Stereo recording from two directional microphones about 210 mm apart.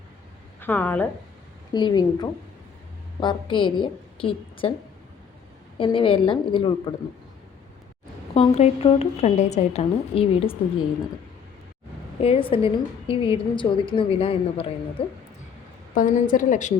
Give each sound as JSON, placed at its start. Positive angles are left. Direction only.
{"t": 0.6, "sound": "a woman's voice", "side_deg": 10}
{"t": 1.7, "sound": "a woman's voice", "side_deg": 20}
{"t": 5.7, "sound": "a woman's voice", "side_deg": 25}
{"t": 8.4, "sound": "a woman's voice", "side_deg": 30}
{"t": 12.2, "sound": "a woman's voice", "side_deg": 25}
{"t": 16.0, "sound": "a woman's voice", "side_deg": 40}